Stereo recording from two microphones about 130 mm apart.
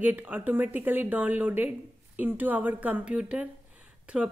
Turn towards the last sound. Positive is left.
turn(degrees=-10)  # may be behind; listen again after turning